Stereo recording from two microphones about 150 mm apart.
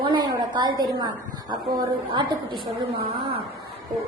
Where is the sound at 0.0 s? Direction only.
30° right (ahead or behind).